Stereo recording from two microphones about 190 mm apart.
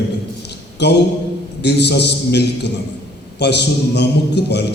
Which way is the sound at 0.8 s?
65° left (ahead or behind).